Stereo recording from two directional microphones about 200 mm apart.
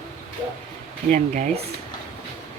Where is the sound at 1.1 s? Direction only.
40° right (ahead or behind).